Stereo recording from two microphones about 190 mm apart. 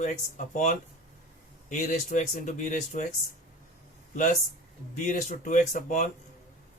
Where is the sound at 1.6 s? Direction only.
40° left (ahead or behind).